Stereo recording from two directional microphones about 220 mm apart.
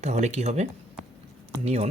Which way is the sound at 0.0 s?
30° right (ahead or behind).